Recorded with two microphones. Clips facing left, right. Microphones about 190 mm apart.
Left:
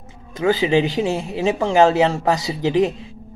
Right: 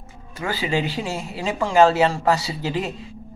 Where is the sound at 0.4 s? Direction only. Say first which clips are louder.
Left 7 dB; 20° left (ahead or behind).